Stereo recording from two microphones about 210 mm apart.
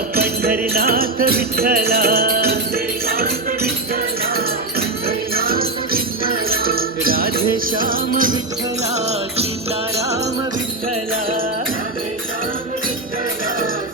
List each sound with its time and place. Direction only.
0.2 s music: 45° right (ahead or behind)
5.0 s music: 45° right (ahead or behind)